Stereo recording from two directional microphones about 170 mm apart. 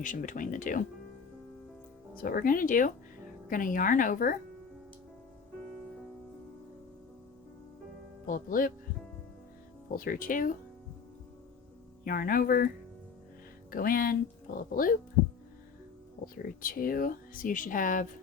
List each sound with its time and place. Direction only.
0.0 s speech: 50° left (ahead or behind)
2.2 s speech: 55° left (ahead or behind)
8.3 s speech: 55° left (ahead or behind)
9.9 s speech: 55° left (ahead or behind)
12.0 s speech: 55° left (ahead or behind)
16.2 s speech: 55° left (ahead or behind)